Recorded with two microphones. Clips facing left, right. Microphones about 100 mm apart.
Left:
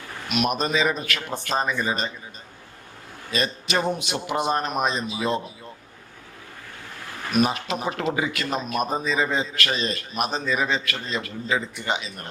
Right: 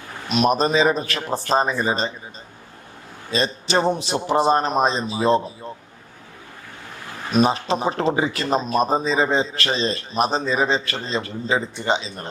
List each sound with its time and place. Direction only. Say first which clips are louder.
0.3 s speech: right 5 dB; 30° right (ahead or behind)
3.3 s speech: right 4 dB; 30° right (ahead or behind)
7.3 s speech: right 4 dB; 30° right (ahead or behind)